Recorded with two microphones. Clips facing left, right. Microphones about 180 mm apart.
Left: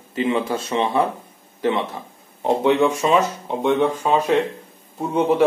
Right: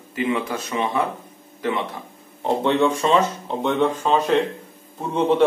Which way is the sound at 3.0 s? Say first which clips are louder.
Left 1 dB; 10° left (ahead or behind).